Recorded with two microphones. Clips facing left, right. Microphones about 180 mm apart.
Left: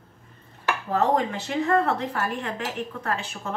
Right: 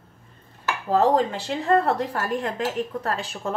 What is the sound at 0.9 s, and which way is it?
Speech, 35° right (ahead or behind).